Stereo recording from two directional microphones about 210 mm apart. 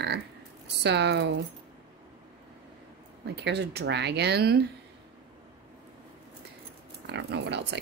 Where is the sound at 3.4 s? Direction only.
55° right (ahead or behind).